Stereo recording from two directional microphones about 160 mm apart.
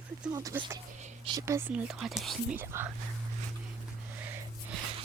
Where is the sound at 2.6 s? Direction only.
15° right (ahead or behind).